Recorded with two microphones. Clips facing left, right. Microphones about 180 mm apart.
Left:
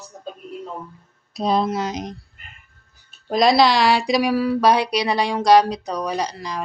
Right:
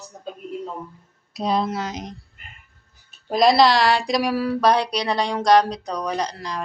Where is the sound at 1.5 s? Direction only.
20° left (ahead or behind).